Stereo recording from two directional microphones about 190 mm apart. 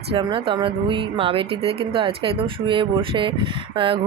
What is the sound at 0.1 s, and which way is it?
Speech, 25° right (ahead or behind).